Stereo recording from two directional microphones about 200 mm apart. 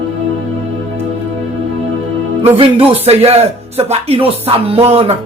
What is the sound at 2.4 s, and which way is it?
Speech, 30° right (ahead or behind).